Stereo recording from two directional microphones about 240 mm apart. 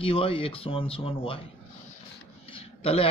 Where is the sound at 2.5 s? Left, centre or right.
Left.